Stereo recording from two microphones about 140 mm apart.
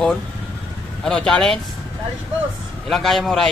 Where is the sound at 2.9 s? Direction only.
Centre (ahead or behind).